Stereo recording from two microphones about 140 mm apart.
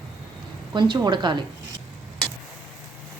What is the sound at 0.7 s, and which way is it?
Speech, 35° right (ahead or behind).